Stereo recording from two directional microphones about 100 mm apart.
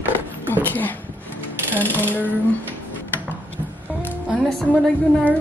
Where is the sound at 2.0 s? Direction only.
20° left (ahead or behind).